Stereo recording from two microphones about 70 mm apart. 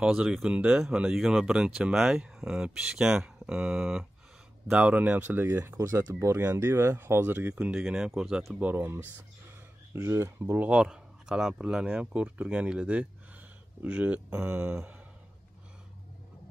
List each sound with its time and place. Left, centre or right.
0.0 s speech: centre
4.6 s speech: centre
7.7 s speech: centre
8.5 s speech: right
10.6 s speech: centre
14.3 s speech: right